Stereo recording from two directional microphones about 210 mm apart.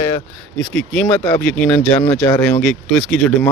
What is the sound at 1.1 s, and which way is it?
Speech, 5° left (ahead or behind).